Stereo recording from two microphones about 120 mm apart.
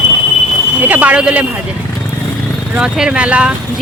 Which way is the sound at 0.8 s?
15° right (ahead or behind).